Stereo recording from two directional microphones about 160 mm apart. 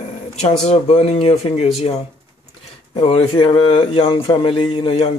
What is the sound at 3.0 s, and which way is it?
Speech, 35° left (ahead or behind).